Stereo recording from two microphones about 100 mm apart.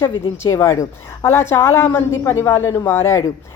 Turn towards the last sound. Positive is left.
turn(degrees=30)  # may be behind; listen again after turning